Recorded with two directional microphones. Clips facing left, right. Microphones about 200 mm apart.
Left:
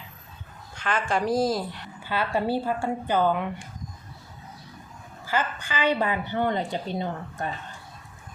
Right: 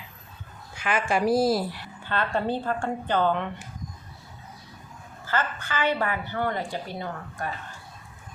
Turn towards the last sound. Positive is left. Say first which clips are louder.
# left 3 dB
turn(degrees=20)  # may be behind; listen again after turning